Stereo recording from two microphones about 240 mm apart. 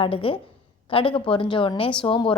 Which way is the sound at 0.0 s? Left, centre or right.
Left.